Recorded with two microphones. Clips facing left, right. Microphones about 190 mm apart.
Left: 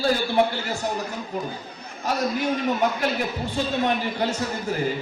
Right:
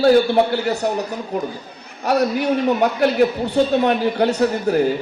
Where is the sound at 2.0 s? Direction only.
65° right (ahead or behind).